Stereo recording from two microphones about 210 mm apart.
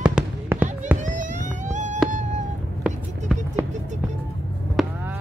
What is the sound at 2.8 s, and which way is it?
Run, 5° right (ahead or behind).